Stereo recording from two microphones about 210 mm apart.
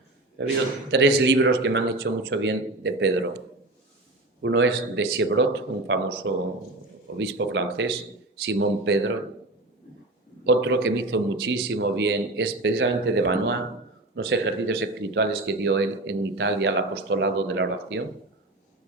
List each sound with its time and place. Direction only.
0.4 s speech: 60° right (ahead or behind)
10.4 s speech: 60° right (ahead or behind)